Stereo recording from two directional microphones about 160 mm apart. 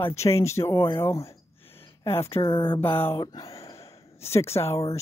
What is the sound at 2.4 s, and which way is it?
Speech, 30° left (ahead or behind).